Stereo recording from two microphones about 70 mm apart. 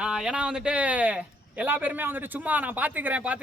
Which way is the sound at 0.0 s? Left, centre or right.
Centre.